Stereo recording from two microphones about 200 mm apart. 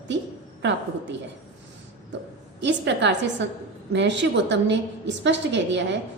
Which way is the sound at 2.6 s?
60° right (ahead or behind).